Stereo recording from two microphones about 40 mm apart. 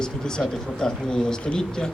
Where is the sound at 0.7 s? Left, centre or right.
Centre.